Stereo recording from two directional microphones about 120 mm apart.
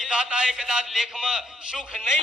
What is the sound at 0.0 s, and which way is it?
A man's voice, 5° right (ahead or behind).